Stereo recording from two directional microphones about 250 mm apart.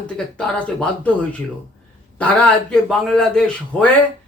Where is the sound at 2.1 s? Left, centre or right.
Centre.